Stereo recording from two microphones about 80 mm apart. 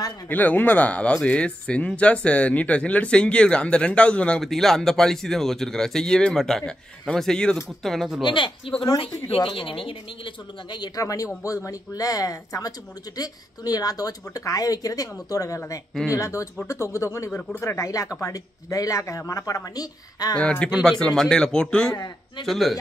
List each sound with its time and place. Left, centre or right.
0.3 s speech: left
4.4 s speech: centre
8.2 s speech: left
11.0 s speech: left
20.3 s speech: centre